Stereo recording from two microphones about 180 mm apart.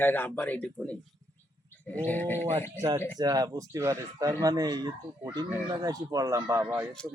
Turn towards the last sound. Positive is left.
turn(degrees=-10)  # may be behind; listen again after turning